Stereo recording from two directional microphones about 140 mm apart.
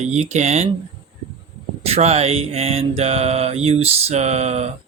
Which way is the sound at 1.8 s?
50° right (ahead or behind).